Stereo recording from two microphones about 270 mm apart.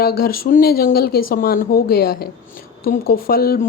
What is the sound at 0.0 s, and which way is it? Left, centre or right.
Speech, left.